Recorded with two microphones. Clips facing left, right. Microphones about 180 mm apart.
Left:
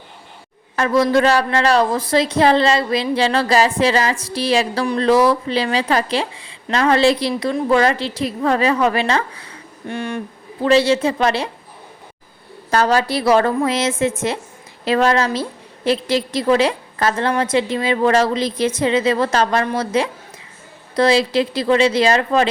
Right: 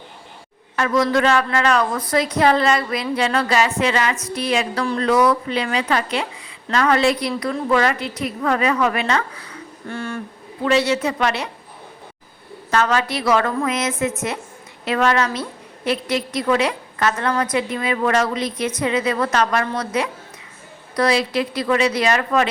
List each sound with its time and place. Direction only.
0.8 s a woman's voice: 30° left (ahead or behind)
9.9 s speech: 15° left (ahead or behind)
10.6 s speech: 30° left (ahead or behind)
12.7 s a woman's voice: 35° left (ahead or behind)